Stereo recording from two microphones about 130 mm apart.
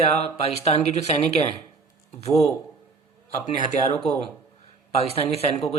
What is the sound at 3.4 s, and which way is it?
Speech, 65° left (ahead or behind).